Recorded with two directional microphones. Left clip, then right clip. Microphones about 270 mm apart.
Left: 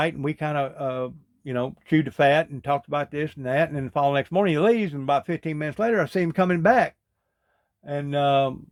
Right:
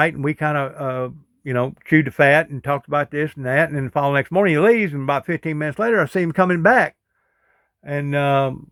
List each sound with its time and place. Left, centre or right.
0.0 s speech: right